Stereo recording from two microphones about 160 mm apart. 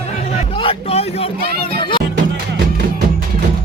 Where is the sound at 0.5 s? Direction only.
35° left (ahead or behind).